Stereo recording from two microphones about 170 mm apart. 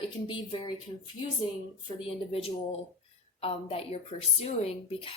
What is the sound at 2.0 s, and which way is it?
Speech, 35° left (ahead or behind).